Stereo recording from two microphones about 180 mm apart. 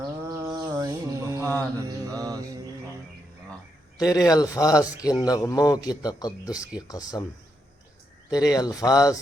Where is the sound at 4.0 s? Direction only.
20° left (ahead or behind).